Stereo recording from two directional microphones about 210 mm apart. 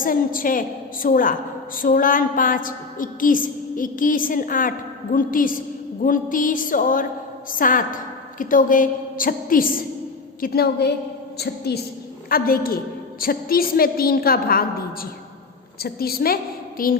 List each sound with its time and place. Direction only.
0.0 s a woman's voice: 40° left (ahead or behind)